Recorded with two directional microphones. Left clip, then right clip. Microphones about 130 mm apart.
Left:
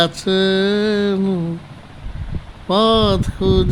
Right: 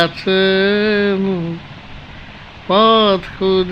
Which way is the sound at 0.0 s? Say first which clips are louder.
Right 2 dB; 55° left (ahead or behind).